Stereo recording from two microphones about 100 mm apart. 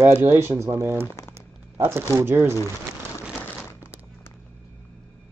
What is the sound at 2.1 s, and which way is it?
Speech, 25° right (ahead or behind).